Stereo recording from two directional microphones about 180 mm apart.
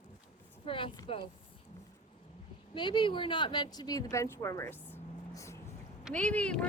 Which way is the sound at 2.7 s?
25° left (ahead or behind).